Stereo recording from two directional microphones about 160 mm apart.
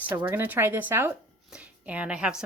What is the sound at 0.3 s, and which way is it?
A woman's voice, 10° right (ahead or behind).